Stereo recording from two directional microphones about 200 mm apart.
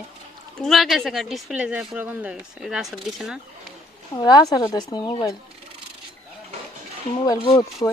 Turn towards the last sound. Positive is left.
turn(degrees=20)  # may be behind; listen again after turning